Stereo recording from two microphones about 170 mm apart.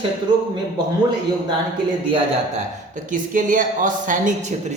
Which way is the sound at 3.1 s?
50° right (ahead or behind).